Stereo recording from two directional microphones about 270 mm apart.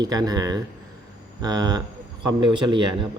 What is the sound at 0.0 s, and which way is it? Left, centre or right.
Speech, centre.